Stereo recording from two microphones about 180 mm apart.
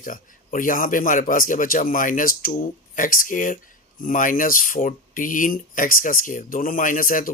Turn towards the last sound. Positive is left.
turn(degrees=50)  # may be behind; listen again after turning